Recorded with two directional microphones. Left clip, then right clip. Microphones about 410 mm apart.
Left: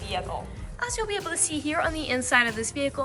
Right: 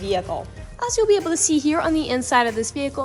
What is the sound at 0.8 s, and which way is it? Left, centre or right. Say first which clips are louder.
Speech: right 11 dB; centre.